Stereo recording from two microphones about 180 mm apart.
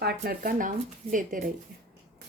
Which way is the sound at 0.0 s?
60° right (ahead or behind).